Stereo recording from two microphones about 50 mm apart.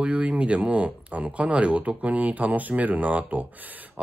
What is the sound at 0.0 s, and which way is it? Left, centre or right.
Speech, right.